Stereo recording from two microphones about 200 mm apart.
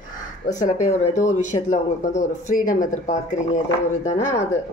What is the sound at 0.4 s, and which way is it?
Speech, 40° left (ahead or behind).